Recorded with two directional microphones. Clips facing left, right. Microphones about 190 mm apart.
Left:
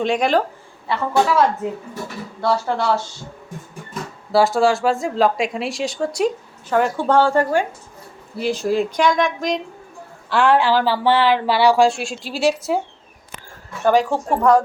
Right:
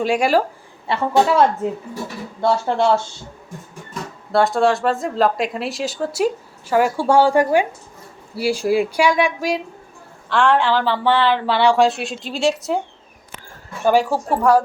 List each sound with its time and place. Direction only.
0.0 s speech: 5° right (ahead or behind)
0.9 s speech: 25° right (ahead or behind)
2.4 s speech: 25° right (ahead or behind)
4.3 s speech: centre (ahead or behind)
10.2 s speech: 5° left (ahead or behind)
13.8 s speech: 10° right (ahead or behind)